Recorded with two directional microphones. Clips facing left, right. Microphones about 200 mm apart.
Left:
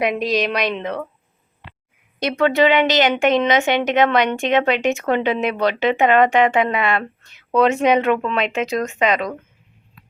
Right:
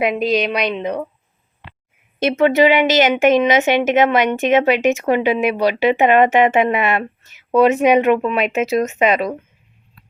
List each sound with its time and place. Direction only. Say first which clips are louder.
0.0 s a woman's voice: right 2 dB; centre (ahead or behind)
0.8 s speech: right 3 dB; 15° right (ahead or behind)
2.1 s a woman's voice: right 3 dB; 25° right (ahead or behind)